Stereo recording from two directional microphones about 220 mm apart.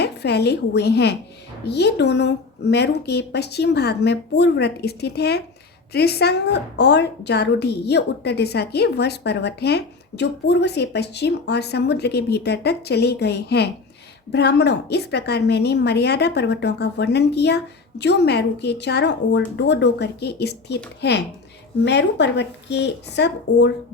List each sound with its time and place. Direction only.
0.0 s a woman's voice: 50° left (ahead or behind)